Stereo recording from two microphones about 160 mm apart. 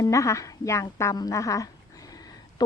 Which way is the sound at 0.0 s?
20° left (ahead or behind).